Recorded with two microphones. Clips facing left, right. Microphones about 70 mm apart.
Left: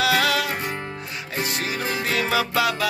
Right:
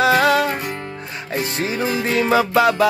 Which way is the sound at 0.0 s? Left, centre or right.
Right.